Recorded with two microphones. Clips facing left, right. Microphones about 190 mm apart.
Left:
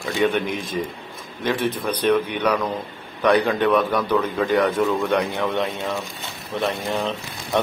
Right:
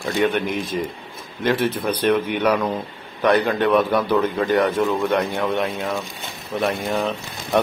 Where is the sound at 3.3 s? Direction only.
10° right (ahead or behind).